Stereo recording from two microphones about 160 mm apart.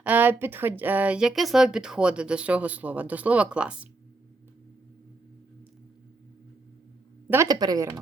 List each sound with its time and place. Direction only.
0.0 s speech: 10° right (ahead or behind)
7.3 s a woman's voice: 20° right (ahead or behind)